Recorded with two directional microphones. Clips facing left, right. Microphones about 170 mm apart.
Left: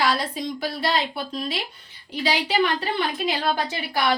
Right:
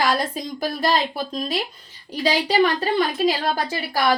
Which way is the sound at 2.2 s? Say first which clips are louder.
Right 4 dB; 40° right (ahead or behind).